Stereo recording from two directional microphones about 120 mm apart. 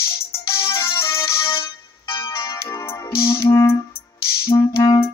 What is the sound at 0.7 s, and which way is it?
Music, 25° left (ahead or behind).